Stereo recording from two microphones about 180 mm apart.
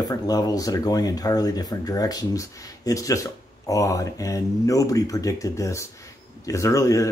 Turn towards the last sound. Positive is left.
turn(degrees=20)  # may be behind; listen again after turning